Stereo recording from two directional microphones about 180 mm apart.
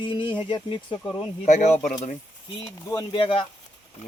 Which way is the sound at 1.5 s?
40° left (ahead or behind).